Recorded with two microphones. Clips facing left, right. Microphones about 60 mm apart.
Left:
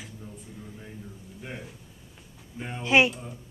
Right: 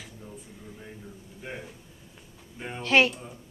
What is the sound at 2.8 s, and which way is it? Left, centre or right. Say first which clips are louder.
Speech: left 1 dB; centre.